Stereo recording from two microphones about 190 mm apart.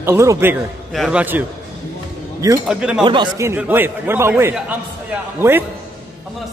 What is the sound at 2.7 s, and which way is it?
Speech, 5° right (ahead or behind).